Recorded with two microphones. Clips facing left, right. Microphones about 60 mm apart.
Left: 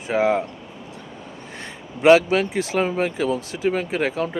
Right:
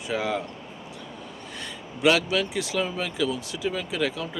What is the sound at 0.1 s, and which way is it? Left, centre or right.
Speech, left.